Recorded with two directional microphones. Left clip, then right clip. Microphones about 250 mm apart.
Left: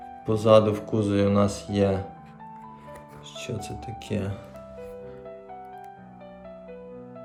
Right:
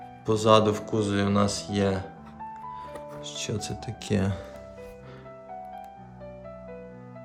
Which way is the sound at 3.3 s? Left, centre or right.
Centre.